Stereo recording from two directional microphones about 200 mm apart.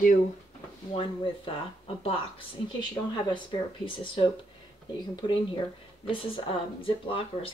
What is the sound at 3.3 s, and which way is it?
Speech, 25° left (ahead or behind).